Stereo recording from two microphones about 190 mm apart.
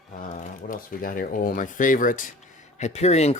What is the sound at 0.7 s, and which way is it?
Speech, 45° left (ahead or behind).